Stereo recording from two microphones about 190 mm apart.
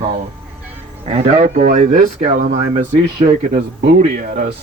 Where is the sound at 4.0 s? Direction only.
60° right (ahead or behind).